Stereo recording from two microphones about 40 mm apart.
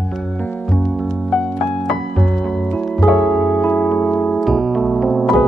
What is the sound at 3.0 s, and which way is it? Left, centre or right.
Music, centre.